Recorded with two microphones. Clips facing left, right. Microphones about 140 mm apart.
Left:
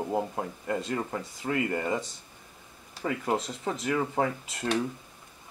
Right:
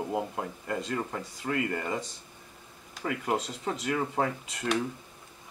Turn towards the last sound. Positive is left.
turn(degrees=30)  # may be behind; listen again after turning